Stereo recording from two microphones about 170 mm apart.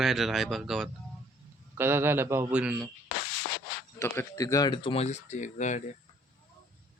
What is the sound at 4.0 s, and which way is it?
Speech, 20° left (ahead or behind).